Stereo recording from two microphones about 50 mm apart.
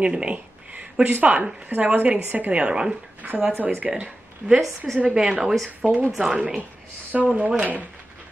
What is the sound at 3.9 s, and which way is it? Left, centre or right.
Speech, centre.